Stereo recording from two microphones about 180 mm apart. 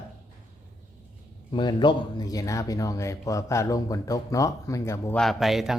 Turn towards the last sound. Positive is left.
turn(degrees=0)  # may be behind; listen again after turning